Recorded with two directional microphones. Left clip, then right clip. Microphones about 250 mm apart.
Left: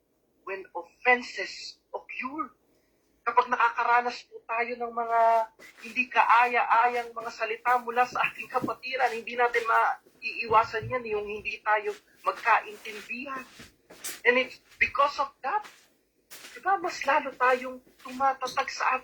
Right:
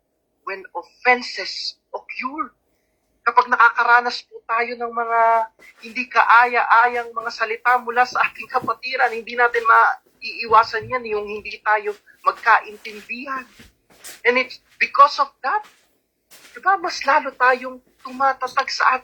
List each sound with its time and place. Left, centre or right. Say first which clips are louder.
0.4 s a man's voice: right 7 dB; centre